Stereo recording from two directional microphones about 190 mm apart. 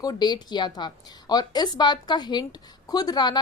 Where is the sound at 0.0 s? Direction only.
20° left (ahead or behind).